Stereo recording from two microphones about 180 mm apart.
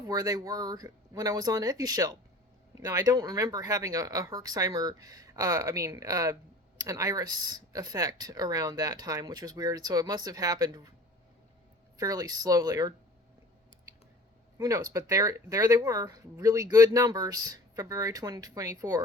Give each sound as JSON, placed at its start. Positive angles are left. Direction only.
{"t": 0.1, "sound": "speech", "side_deg": -20}
{"t": 11.9, "sound": "speech", "side_deg": -20}
{"t": 14.6, "sound": "speech", "side_deg": -20}